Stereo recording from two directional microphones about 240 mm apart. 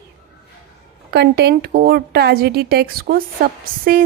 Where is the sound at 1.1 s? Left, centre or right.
Right.